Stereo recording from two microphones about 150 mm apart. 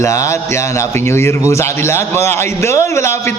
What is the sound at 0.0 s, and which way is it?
A man's voice, 20° left (ahead or behind).